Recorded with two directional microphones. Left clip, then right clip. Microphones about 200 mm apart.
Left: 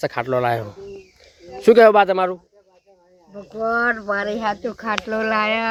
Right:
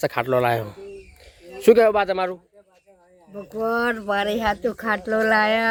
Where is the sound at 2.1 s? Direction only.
30° left (ahead or behind).